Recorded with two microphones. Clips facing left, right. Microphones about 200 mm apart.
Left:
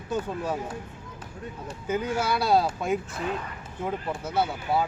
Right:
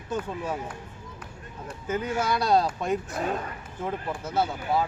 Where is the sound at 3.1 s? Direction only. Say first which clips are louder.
Right 2 dB; 45° right (ahead or behind).